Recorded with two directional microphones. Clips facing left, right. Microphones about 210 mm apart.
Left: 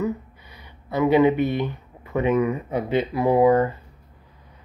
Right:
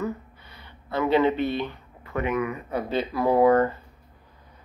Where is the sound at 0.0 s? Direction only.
15° left (ahead or behind).